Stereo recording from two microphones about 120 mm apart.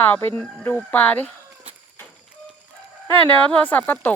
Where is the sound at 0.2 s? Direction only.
20° left (ahead or behind).